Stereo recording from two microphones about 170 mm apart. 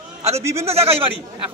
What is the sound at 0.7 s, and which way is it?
Speech, 35° right (ahead or behind).